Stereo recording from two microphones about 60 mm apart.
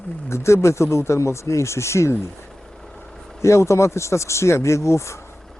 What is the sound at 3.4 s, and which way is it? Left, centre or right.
Speech, left.